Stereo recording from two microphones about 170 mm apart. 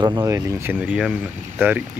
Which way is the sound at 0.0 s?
20° right (ahead or behind).